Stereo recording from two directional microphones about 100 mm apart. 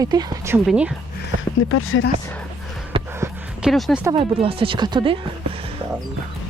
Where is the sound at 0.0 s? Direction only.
40° right (ahead or behind).